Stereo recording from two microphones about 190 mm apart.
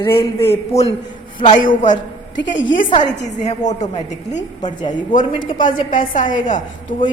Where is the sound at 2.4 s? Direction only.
75° left (ahead or behind).